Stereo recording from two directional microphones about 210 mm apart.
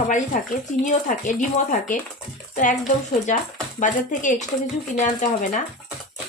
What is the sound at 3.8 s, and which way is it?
Speech, 35° left (ahead or behind).